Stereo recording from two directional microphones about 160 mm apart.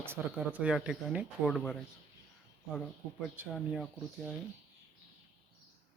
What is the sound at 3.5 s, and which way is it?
Speech, centre (ahead or behind).